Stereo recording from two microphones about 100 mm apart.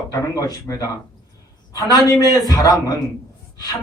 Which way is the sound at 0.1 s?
35° left (ahead or behind).